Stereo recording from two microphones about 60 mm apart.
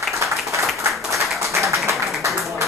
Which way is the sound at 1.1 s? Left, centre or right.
Right.